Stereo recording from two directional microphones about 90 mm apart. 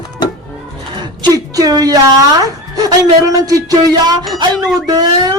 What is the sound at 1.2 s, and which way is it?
Speech, 45° right (ahead or behind).